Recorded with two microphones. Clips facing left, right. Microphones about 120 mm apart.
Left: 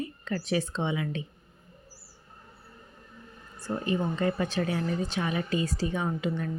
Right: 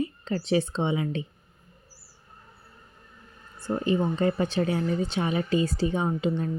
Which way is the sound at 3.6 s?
25° right (ahead or behind).